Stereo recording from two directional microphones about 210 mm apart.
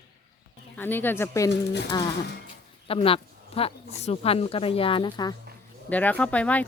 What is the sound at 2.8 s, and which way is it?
Speech, 25° left (ahead or behind).